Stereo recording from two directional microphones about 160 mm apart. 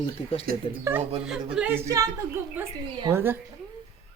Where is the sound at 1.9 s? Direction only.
20° right (ahead or behind).